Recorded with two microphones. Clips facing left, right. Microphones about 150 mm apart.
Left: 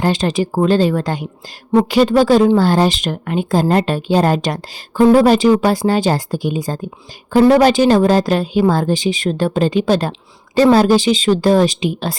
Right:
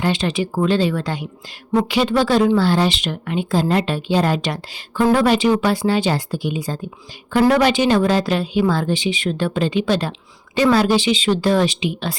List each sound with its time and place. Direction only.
0.0 s a woman's voice: 40° left (ahead or behind)